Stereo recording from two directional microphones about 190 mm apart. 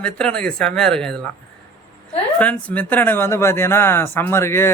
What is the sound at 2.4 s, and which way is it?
Speech, 5° left (ahead or behind).